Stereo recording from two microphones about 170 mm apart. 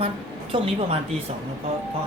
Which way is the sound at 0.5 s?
35° right (ahead or behind).